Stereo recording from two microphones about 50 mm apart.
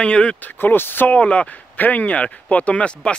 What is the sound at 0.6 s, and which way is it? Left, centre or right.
Speech, left.